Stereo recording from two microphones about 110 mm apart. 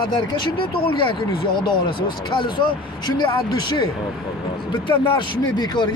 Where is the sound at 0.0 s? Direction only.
50° left (ahead or behind).